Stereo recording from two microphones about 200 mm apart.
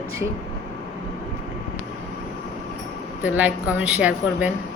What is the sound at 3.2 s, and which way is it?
A woman's voice, 5° right (ahead or behind).